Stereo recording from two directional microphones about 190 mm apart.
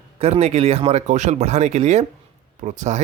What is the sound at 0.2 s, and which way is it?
Speech, 35° right (ahead or behind).